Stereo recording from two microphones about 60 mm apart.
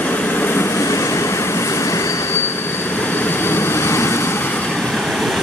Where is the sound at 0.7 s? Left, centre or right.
Left.